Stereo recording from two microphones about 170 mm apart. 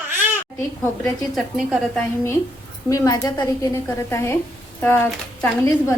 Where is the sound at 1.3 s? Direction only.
Centre (ahead or behind).